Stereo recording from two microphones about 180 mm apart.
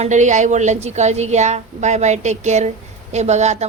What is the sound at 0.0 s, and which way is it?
A woman's voice, 40° right (ahead or behind).